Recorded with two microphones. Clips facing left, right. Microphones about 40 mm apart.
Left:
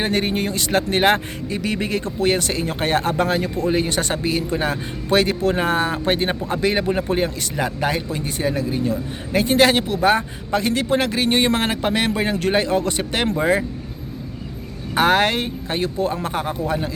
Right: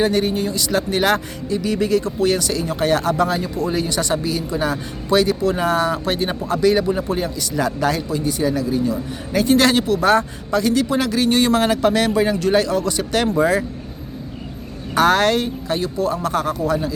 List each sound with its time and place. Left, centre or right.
0.0 s speech: left
7.5 s a man's voice: left
8.1 s a man's voice: left; by 10.2 s centre
10.5 s a man's voice: left
14.9 s a man's voice: left